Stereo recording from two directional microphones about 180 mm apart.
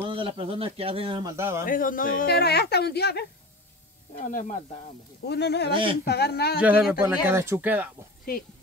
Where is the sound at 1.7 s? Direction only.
50° left (ahead or behind); by 3.2 s 65° left (ahead or behind).